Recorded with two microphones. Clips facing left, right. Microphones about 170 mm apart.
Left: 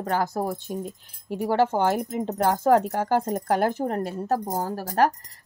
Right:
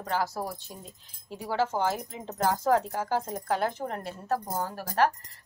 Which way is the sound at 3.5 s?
45° left (ahead or behind).